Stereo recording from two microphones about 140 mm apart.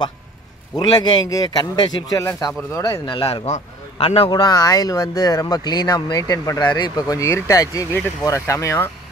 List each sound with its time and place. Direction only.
0.7 s a man's voice: 30° left (ahead or behind)
3.1 s a man's voice: 40° left (ahead or behind); by 8.9 s 20° left (ahead or behind)